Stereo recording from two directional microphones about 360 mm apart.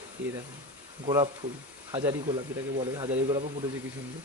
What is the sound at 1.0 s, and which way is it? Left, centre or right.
Speech, centre.